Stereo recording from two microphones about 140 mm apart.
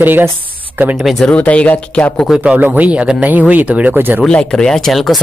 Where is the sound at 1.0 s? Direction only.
5° left (ahead or behind).